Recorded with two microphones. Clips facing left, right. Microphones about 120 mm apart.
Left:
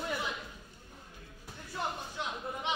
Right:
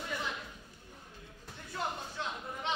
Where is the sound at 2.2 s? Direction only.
15° left (ahead or behind).